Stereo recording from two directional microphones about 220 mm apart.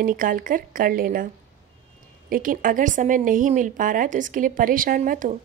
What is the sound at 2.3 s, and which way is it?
A woman's voice, 40° right (ahead or behind).